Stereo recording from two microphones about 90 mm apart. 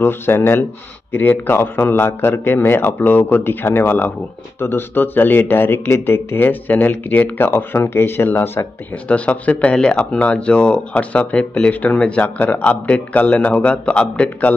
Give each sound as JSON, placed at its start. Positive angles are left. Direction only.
{"t": 0.0, "sound": "a man's voice", "side_deg": 25}